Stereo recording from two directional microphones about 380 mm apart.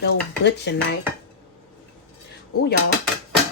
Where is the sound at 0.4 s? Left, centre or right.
Left.